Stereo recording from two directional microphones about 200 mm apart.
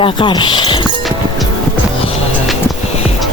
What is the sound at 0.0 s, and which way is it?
Speech, 25° left (ahead or behind).